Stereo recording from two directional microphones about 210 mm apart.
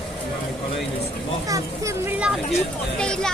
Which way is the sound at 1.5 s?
15° right (ahead or behind).